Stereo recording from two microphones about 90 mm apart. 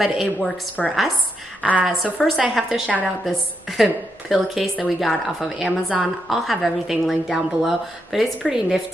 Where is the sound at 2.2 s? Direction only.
Centre (ahead or behind).